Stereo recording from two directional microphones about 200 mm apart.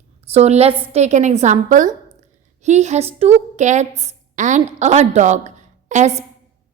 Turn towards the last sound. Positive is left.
turn(degrees=-35)  # may be behind; listen again after turning